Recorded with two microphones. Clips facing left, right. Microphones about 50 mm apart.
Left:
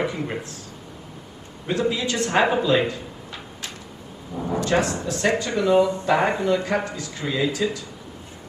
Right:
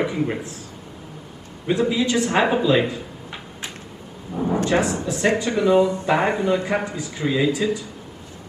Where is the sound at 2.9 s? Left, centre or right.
Right.